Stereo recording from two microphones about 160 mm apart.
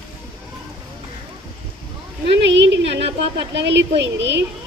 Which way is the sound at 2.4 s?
90° right.